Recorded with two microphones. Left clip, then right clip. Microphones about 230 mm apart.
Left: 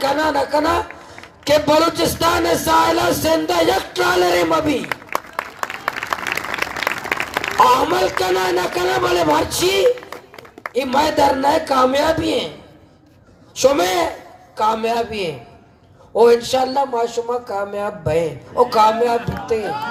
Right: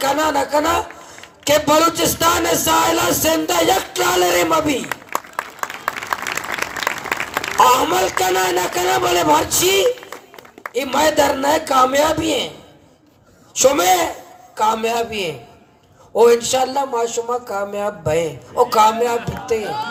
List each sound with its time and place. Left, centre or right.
0.0 s speech: right
4.8 s applause: centre
7.5 s speech: right
13.6 s speech: right
19.6 s speech: centre